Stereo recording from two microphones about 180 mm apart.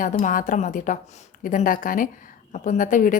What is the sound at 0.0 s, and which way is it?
A woman's voice, 45° left (ahead or behind).